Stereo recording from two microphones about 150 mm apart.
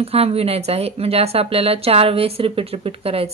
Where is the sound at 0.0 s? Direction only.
40° right (ahead or behind).